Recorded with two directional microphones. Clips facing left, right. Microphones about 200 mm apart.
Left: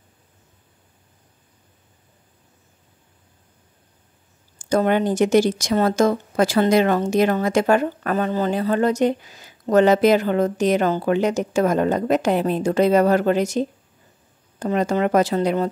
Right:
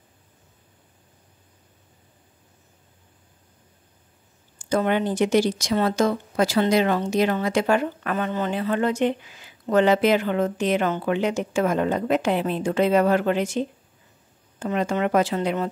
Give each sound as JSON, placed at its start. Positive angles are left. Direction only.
{"t": 4.6, "sound": "speech", "side_deg": 45}